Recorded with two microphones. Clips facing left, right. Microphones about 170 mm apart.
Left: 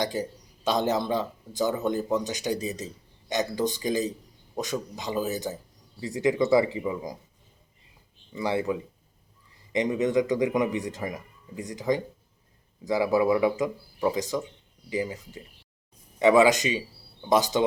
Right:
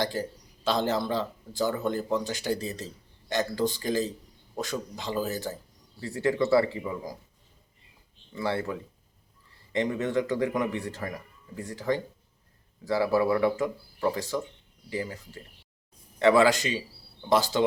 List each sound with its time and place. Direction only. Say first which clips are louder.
0.0 s speech: left 1 dB; 15° left (ahead or behind)
8.3 s speech: left 3 dB; 15° left (ahead or behind)